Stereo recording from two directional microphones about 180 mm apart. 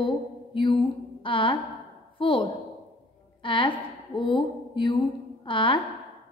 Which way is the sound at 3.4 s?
30° left (ahead or behind).